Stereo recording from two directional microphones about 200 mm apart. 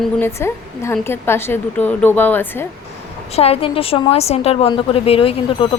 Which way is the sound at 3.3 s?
30° left (ahead or behind).